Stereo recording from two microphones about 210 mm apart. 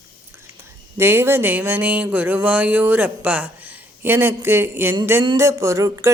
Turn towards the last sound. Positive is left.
turn(degrees=-15)  # may be behind; listen again after turning